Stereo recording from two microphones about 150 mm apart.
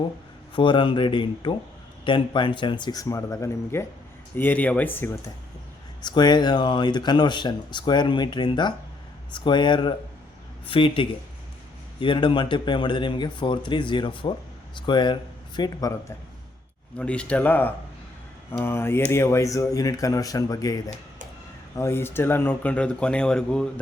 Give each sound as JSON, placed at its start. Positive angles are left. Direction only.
{"t": 0.5, "sound": "a man's voice", "side_deg": 35}
{"t": 6.0, "sound": "a man's voice", "side_deg": 30}
{"t": 17.0, "sound": "speech", "side_deg": 5}